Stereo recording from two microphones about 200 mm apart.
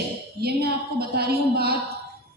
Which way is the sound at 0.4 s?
55° right (ahead or behind).